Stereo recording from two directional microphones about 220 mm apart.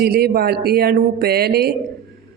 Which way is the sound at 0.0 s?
45° right (ahead or behind).